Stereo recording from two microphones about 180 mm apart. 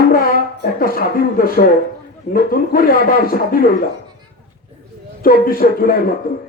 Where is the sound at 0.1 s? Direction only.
55° left (ahead or behind).